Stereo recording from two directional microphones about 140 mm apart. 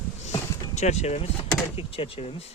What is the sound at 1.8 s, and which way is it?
Speech, 40° left (ahead or behind).